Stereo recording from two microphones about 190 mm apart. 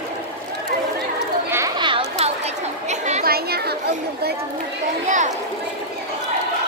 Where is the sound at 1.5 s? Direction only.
20° right (ahead or behind).